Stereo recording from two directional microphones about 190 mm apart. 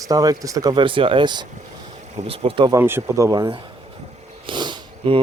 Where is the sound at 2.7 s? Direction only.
15° right (ahead or behind).